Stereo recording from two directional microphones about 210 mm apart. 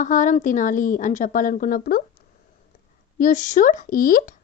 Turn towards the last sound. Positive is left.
turn(degrees=40)  # may be behind; listen again after turning